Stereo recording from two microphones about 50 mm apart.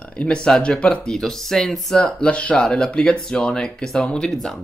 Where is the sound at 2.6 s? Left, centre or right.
Centre.